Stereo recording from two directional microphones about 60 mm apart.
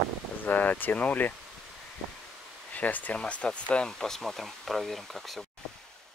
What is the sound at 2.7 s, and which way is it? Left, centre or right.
Speech, left.